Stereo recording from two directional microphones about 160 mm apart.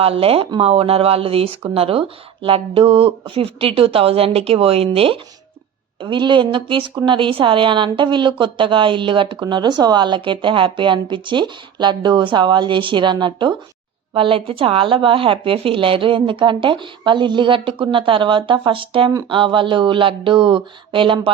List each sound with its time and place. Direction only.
0.0 s a woman's voice: 35° right (ahead or behind)